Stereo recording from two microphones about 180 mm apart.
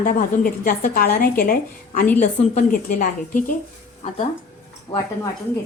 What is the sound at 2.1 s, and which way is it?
A woman's voice, 40° left (ahead or behind).